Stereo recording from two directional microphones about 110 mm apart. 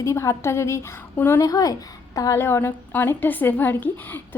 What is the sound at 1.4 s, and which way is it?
A woman's voice, 35° left (ahead or behind).